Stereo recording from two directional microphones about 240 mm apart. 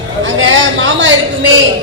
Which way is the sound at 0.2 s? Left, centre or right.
Right.